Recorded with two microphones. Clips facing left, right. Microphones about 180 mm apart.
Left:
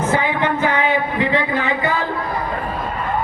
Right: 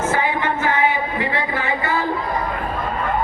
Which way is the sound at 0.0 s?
20° left (ahead or behind).